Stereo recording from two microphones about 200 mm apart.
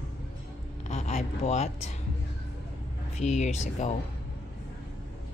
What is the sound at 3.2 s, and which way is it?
Speech, 35° left (ahead or behind).